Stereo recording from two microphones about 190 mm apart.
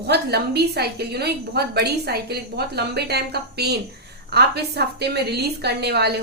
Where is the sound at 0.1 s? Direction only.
60° right (ahead or behind).